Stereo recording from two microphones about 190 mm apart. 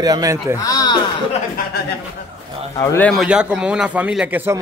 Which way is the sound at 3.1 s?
5° right (ahead or behind).